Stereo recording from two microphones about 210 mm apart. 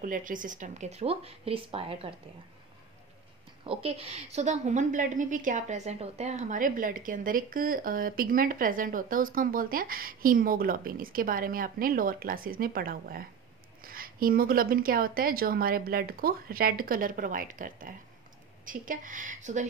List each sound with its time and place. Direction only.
0.0 s a woman's voice: 40° right (ahead or behind)
3.6 s a woman's voice: 25° right (ahead or behind)